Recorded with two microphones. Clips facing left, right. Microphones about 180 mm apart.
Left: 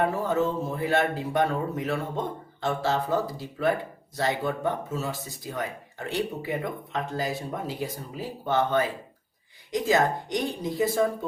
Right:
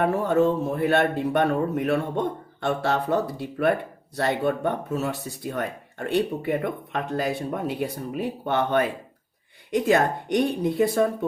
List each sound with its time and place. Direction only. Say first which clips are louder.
0.0 s speech: right 4 dB; 65° right (ahead or behind)